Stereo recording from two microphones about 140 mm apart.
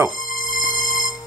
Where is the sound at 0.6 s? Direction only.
70° left (ahead or behind).